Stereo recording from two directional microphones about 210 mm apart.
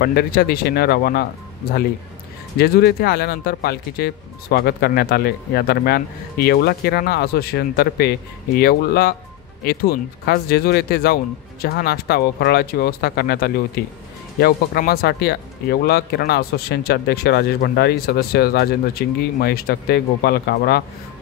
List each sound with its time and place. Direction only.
0.0 s speech: 45° left (ahead or behind)
2.6 s speech: 50° left (ahead or behind)